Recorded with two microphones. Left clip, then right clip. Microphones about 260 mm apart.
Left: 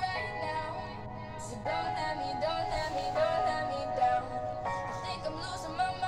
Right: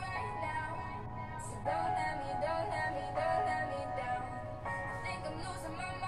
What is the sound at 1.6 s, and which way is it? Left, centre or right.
Music, left.